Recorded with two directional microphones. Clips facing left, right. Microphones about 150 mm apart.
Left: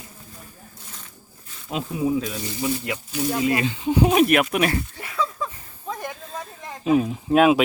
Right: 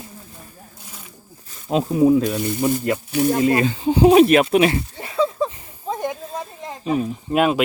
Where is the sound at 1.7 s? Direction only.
40° right (ahead or behind).